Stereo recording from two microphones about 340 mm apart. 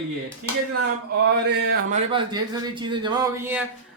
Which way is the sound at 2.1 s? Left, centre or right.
Centre.